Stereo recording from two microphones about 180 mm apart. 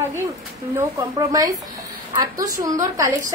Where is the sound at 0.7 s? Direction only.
20° right (ahead or behind).